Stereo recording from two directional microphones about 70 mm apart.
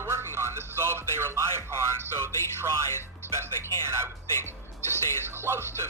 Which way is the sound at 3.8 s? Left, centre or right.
Right.